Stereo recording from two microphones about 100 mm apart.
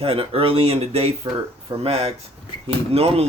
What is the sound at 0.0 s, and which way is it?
Speech, 70° right (ahead or behind).